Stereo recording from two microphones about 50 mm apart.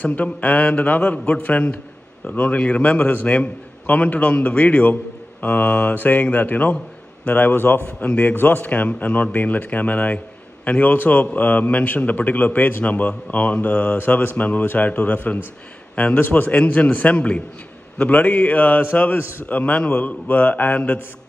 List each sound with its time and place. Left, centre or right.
0.0 s a man's voice: left
7.3 s a man's voice: left
8.1 s a man's voice: left
13.9 s mantra: left
14.3 s a man's voice: left